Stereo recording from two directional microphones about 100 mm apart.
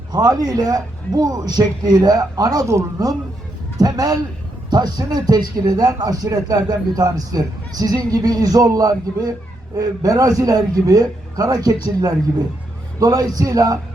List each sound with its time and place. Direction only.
0.1 s speech: 40° right (ahead or behind)